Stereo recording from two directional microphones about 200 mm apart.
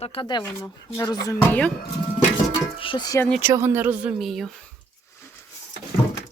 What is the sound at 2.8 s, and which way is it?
Speech, 25° left (ahead or behind).